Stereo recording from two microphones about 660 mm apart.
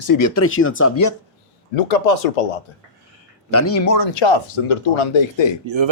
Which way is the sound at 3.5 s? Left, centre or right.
Left.